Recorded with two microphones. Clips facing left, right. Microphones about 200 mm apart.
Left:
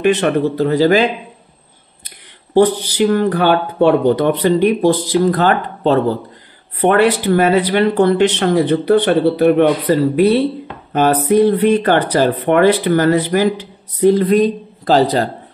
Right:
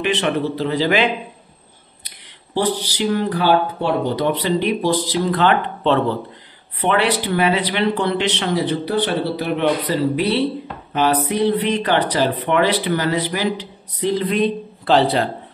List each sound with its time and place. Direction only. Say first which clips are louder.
0.0 s speech: left 6 dB; 45° left (ahead or behind)
2.0 s speech: left 6 dB; 50° left (ahead or behind)